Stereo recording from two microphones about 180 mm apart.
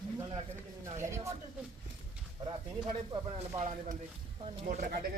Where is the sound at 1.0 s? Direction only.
15° right (ahead or behind).